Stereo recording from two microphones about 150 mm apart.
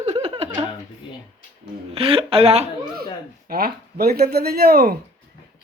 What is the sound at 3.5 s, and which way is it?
Speech, 90° right.